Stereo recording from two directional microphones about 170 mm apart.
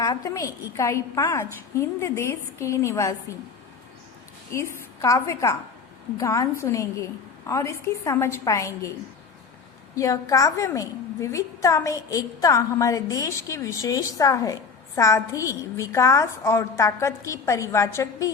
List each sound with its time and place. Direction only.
0.0 s a woman's voice: 20° left (ahead or behind)
4.9 s a woman's voice: 20° left (ahead or behind)
9.9 s a woman's voice: 20° left (ahead or behind)